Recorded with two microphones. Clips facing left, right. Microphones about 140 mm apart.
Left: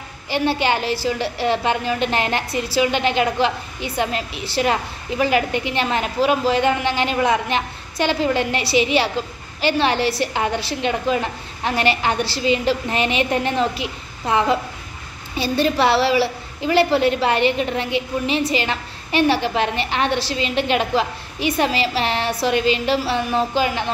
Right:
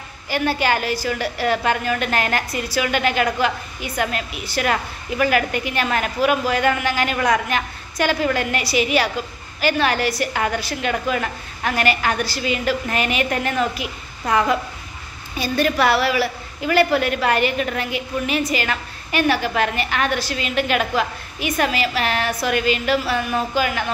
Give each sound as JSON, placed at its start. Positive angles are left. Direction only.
{"t": 0.3, "sound": "a woman's voice", "side_deg": 25}